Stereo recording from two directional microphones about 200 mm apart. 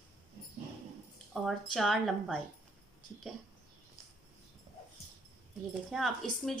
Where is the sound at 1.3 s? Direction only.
Centre (ahead or behind).